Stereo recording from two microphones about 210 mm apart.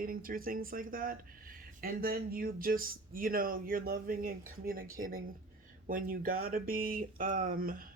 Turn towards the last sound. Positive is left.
turn(degrees=-45)  # may be behind; listen again after turning